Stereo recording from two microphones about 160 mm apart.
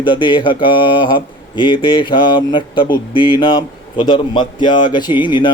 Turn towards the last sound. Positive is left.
turn(degrees=30)  # may be behind; listen again after turning